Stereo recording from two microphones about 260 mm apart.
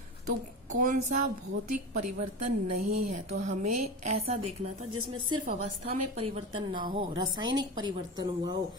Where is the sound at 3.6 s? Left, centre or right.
Right.